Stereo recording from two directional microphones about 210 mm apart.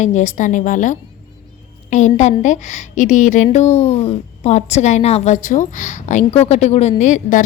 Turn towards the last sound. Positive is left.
turn(degrees=35)  # may be behind; listen again after turning